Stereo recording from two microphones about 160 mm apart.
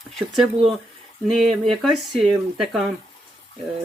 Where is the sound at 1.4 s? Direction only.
45° right (ahead or behind).